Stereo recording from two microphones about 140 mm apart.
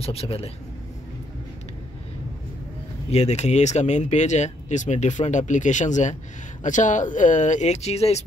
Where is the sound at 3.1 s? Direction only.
50° left (ahead or behind).